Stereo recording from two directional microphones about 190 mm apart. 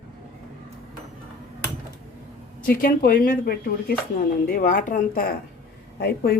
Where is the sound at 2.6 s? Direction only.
50° left (ahead or behind).